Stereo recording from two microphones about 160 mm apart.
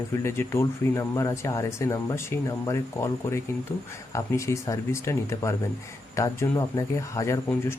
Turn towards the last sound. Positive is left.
turn(degrees=20)  # may be behind; listen again after turning